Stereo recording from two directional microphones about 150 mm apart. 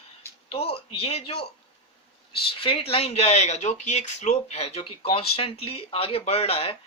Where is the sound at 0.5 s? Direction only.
40° left (ahead or behind).